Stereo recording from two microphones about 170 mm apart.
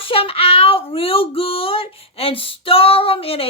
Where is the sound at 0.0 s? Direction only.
35° left (ahead or behind).